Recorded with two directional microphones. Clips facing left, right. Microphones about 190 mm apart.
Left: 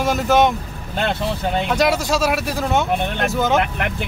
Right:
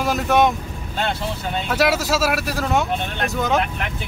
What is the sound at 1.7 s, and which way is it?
Speech, 5° right (ahead or behind).